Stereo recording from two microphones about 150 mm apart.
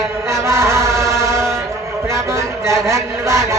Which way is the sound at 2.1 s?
20° right (ahead or behind).